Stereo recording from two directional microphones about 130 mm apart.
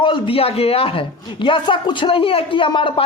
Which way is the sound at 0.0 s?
45° left (ahead or behind).